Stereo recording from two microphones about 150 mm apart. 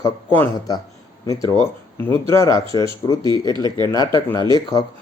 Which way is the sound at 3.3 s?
30° right (ahead or behind).